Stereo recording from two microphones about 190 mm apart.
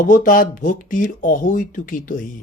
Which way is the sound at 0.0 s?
45° left (ahead or behind).